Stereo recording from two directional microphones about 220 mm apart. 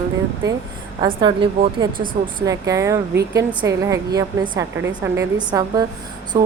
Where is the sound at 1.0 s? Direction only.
20° right (ahead or behind).